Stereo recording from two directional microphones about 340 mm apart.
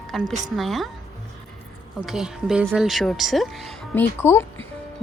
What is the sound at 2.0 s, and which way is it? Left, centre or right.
A woman's voice, centre.